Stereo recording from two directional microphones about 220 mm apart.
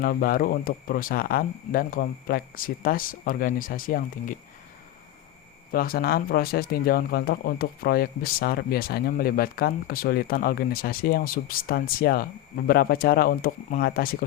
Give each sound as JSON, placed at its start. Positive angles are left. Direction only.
{"t": 0.0, "sound": "speech", "side_deg": 40}
{"t": 5.7, "sound": "speech", "side_deg": 40}